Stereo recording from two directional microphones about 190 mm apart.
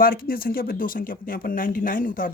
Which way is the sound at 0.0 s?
50° left (ahead or behind).